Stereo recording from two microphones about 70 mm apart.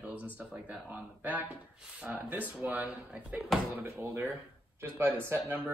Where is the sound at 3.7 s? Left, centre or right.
Right.